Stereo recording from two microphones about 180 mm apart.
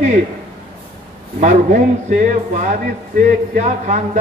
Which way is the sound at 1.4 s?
45° right (ahead or behind).